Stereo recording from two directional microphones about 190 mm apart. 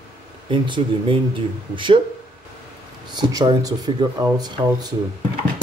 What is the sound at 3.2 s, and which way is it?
Speech, 20° right (ahead or behind).